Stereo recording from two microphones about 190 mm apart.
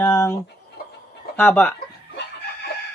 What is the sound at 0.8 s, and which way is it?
Chicken, 55° left (ahead or behind).